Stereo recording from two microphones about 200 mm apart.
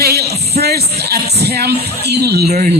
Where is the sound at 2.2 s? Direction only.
55° right (ahead or behind).